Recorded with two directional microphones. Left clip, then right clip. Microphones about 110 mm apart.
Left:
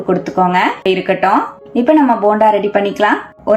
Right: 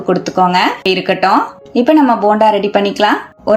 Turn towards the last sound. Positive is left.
turn(degrees=-30)  # may be behind; listen again after turning